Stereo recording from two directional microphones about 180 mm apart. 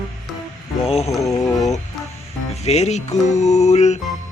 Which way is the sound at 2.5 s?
35° left (ahead or behind).